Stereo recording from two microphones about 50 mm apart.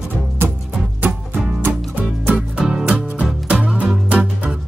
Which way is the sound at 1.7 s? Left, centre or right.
Right.